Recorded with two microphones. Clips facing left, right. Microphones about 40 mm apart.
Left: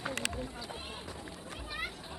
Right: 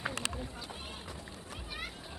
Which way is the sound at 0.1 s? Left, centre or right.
Left.